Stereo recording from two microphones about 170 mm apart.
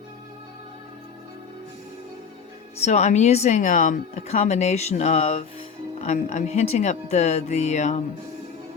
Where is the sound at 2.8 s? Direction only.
40° left (ahead or behind).